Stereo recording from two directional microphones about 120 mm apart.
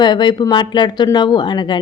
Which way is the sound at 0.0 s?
40° left (ahead or behind).